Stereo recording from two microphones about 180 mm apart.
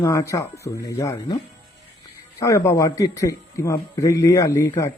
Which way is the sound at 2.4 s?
15° left (ahead or behind).